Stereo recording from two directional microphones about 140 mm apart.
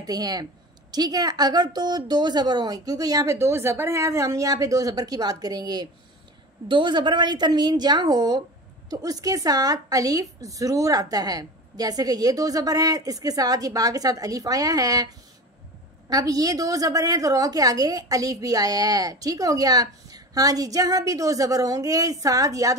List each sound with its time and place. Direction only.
0.0 s a woman's voice: 30° right (ahead or behind)